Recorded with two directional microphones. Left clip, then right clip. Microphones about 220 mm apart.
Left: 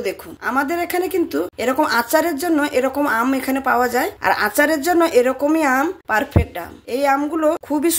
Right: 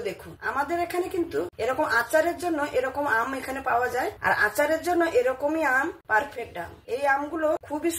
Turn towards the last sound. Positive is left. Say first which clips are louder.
# left 8 dB
turn(degrees=45)  # may be behind; listen again after turning